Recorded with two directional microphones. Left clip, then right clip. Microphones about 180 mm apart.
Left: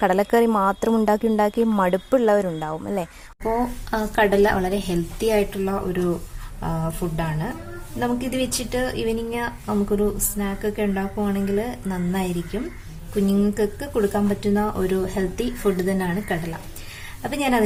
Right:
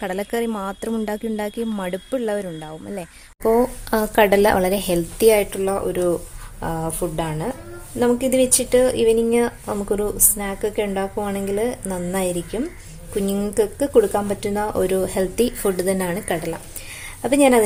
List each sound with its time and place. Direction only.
0.0 s speech: 10° left (ahead or behind)
3.9 s speech: 45° right (ahead or behind)
13.3 s speech: 50° right (ahead or behind)